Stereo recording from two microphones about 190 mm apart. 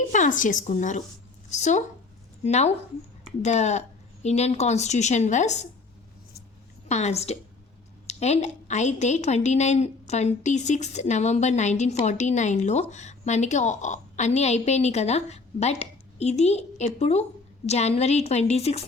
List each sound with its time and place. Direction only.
0.1 s a woman's voice: 40° left (ahead or behind)
6.8 s a woman's voice: 35° left (ahead or behind)